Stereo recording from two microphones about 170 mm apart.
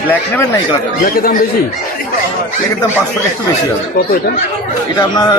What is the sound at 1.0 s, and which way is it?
Speech, 60° left (ahead or behind).